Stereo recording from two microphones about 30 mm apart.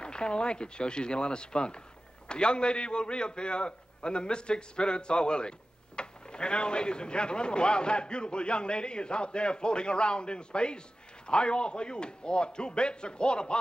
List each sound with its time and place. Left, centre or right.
0.0 s speech: left